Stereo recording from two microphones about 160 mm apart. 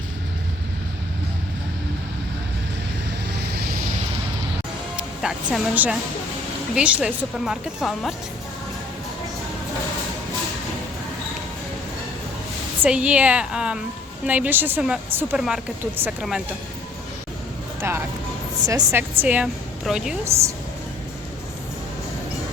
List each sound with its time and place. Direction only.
4.9 s a woman's voice: 5° right (ahead or behind)
12.8 s a woman's voice: 10° right (ahead or behind)
17.7 s a woman's voice: 15° right (ahead or behind)